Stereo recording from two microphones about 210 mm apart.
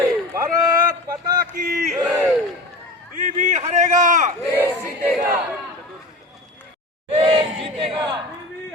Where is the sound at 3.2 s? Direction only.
35° right (ahead or behind).